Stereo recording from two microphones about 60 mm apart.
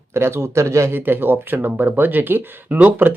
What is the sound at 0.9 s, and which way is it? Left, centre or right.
Speech, right.